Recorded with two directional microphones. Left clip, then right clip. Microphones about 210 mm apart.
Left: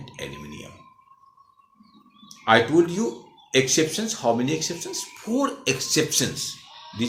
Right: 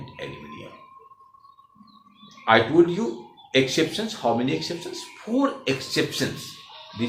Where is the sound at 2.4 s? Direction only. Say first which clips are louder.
Even; 50° left (ahead or behind).